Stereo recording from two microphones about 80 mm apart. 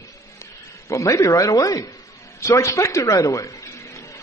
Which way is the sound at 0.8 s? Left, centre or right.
Left.